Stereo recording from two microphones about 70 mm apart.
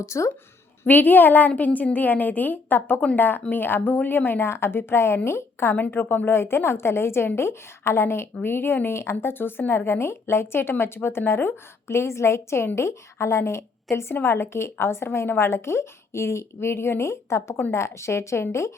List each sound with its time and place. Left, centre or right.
0.0 s a woman's voice: left
0.9 s a woman's voice: left